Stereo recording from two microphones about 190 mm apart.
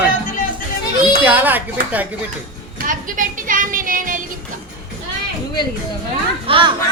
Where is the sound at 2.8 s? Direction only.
45° right (ahead or behind).